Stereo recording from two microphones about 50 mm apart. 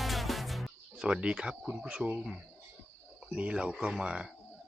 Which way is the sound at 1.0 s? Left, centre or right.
Centre.